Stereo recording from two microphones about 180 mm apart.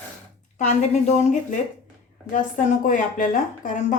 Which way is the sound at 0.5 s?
40° left (ahead or behind).